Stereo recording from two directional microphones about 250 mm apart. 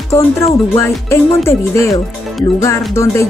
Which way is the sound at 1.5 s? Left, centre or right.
Centre.